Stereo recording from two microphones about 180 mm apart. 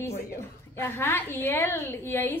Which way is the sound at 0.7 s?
15° left (ahead or behind).